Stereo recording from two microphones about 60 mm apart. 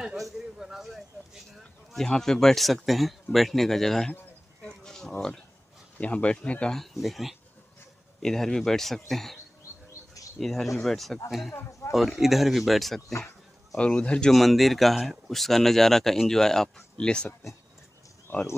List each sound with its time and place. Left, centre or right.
0.2 s a man's voice: centre
1.5 s a sound: centre
2.0 s speech: centre
4.6 s a sound: centre
5.9 s speech: left
6.7 s speech: centre
10.4 s speech: centre
11.8 s a sound: left
12.2 s speech: centre
13.7 s speech: centre
14.3 s speech: centre